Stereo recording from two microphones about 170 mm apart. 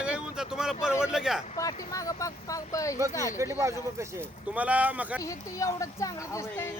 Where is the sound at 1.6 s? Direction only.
20° left (ahead or behind).